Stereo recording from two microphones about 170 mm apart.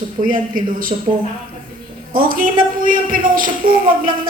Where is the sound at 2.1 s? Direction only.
55° right (ahead or behind).